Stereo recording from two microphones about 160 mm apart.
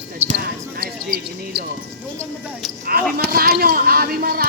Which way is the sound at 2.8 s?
65° right (ahead or behind).